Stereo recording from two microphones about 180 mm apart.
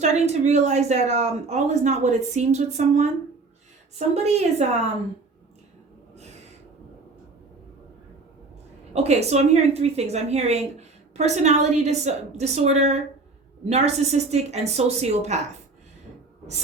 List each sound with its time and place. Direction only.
0.0 s a woman's voice: 40° right (ahead or behind)
8.9 s a woman's voice: 35° right (ahead or behind)